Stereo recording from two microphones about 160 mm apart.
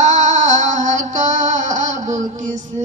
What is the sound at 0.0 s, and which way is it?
Music, 50° right (ahead or behind).